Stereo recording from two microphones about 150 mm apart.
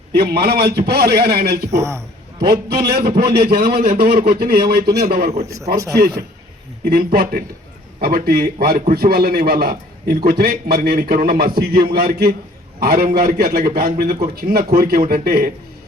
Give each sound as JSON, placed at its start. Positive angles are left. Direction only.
{"t": 0.1, "sound": "a man's voice", "side_deg": -90}
{"t": 1.7, "sound": "a man's voice", "side_deg": -20}
{"t": 2.4, "sound": "a man's voice", "side_deg": -90}
{"t": 6.8, "sound": "a man's voice", "side_deg": -90}
{"t": 12.8, "sound": "a man's voice", "side_deg": -75}